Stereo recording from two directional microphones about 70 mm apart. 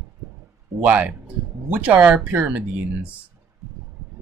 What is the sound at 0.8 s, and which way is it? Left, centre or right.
Speech, right.